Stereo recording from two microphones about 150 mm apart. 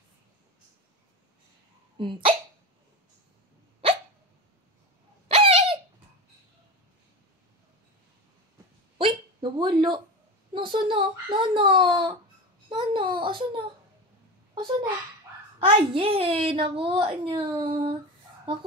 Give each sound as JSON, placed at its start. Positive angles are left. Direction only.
{"t": 2.0, "sound": "a child's voice", "side_deg": -35}
{"t": 5.3, "sound": "a sound", "side_deg": -40}
{"t": 8.9, "sound": "hiccup", "side_deg": -30}
{"t": 10.5, "sound": "a child's voice", "side_deg": -35}
{"t": 15.6, "sound": "a child's voice", "side_deg": -35}